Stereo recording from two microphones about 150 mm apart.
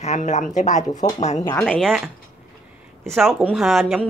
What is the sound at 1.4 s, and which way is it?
Speech, 10° left (ahead or behind).